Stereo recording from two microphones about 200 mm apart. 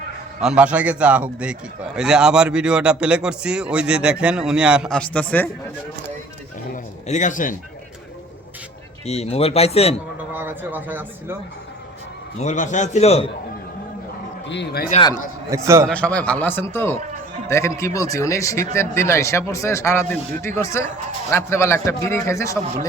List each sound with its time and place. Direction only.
0.4 s a man's voice: 5° right (ahead or behind)
7.1 s speech: 40° left (ahead or behind)
9.0 s speech: 30° left (ahead or behind)
10.3 s speech: 10° right (ahead or behind)
12.4 s speech: 35° left (ahead or behind)
14.4 s speech: 60° left (ahead or behind)
15.4 s speech: 15° right (ahead or behind)
15.9 s a man's voice: 5° left (ahead or behind)